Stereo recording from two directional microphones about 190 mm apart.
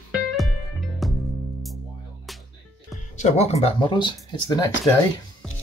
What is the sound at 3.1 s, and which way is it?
Speech, 35° left (ahead or behind).